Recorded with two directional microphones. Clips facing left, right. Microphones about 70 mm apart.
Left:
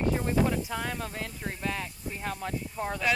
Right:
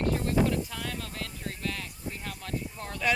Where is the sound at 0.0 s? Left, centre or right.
Centre.